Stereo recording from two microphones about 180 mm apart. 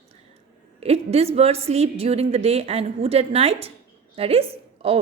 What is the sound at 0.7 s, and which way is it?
A woman's voice, 35° right (ahead or behind).